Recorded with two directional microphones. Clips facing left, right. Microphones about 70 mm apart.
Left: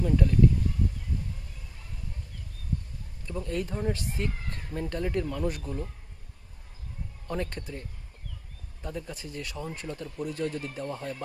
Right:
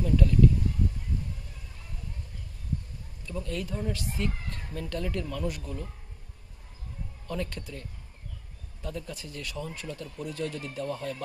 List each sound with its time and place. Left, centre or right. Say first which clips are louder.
0.0 s speech: even; left
3.3 s speech: left 2 dB; left
7.2 s speech: left 1 dB; left
8.8 s speech: even; left